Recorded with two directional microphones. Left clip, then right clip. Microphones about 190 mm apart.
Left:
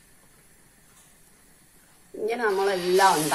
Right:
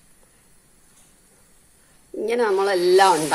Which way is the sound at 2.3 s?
60° right (ahead or behind).